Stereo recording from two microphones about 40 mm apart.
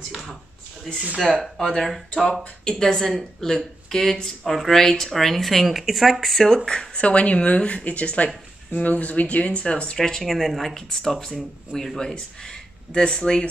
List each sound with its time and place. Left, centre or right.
0.9 s speech: centre
2.6 s speech: centre
4.5 s speech: centre
4.7 s speech: centre
9.9 s speech: centre